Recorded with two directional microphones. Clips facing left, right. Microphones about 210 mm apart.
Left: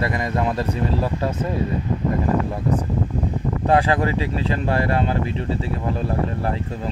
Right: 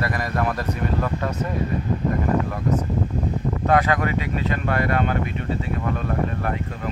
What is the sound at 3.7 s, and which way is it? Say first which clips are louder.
Speech: left 2 dB; 30° left (ahead or behind).